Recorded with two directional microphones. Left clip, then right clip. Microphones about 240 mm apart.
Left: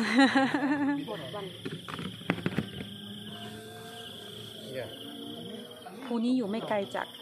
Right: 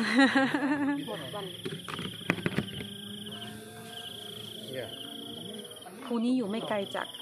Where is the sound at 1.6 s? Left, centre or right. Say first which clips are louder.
Right 2 dB; right.